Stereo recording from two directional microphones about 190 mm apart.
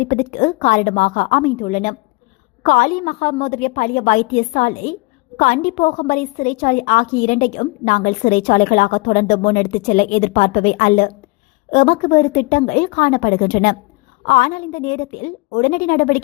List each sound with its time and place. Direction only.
0.0 s a woman's voice: 45° left (ahead or behind)